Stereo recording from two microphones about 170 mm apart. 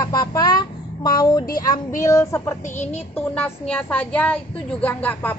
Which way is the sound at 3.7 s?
10° left (ahead or behind).